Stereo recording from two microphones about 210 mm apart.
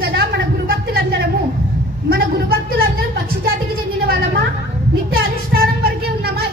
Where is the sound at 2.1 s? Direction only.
45° right (ahead or behind).